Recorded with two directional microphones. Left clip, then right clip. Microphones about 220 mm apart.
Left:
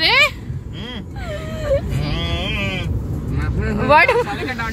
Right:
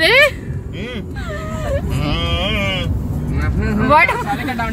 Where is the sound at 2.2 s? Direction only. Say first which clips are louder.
Right 3 dB; 5° left (ahead or behind).